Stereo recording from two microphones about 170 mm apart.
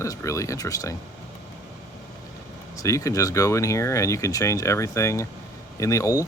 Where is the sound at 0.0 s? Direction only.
15° left (ahead or behind).